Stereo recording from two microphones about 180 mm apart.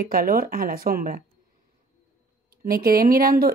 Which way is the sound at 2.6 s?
55° right (ahead or behind).